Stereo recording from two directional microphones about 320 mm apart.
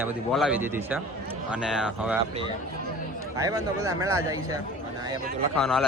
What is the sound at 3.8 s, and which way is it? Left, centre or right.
Speech, centre.